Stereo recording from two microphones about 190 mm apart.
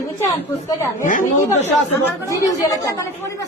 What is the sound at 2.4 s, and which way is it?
Speech, 15° left (ahead or behind).